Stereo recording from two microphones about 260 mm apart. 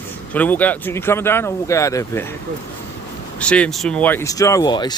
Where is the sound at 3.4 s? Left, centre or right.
Centre.